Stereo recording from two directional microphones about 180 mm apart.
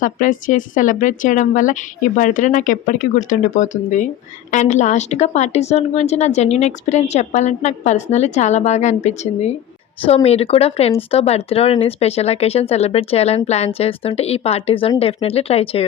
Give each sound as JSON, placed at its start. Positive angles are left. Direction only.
{"t": 0.0, "sound": "a woman's voice", "side_deg": 45}